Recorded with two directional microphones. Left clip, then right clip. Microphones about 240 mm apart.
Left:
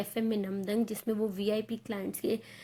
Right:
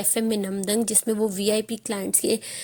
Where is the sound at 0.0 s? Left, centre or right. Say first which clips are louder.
Right 8 dB; right.